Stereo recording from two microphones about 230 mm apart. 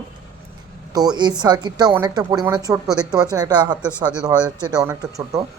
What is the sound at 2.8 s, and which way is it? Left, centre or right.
Speech, centre.